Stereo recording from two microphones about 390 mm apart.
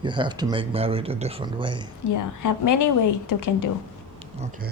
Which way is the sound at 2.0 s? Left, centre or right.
Left.